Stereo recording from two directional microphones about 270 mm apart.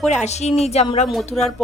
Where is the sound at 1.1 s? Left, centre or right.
Centre.